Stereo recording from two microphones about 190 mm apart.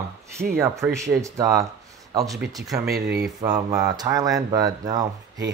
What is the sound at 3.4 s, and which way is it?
Speech, 20° right (ahead or behind).